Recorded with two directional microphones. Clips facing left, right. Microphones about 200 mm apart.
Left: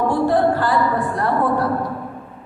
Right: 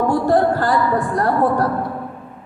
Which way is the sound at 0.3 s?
45° right (ahead or behind).